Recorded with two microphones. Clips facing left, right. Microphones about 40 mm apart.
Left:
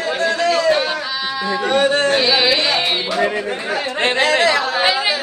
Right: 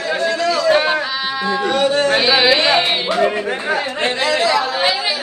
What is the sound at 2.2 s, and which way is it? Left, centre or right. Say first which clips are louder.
Carnatic music: right 2 dB; centre.